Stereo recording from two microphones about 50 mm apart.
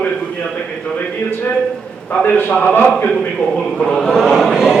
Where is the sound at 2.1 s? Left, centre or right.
Left.